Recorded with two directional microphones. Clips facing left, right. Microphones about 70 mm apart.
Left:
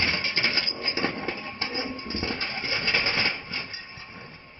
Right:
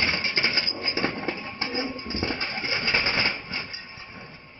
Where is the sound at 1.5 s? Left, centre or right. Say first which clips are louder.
Right 2 dB; right.